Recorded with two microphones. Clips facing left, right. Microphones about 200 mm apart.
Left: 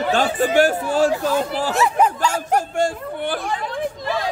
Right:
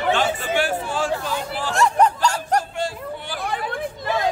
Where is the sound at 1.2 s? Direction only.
40° left (ahead or behind).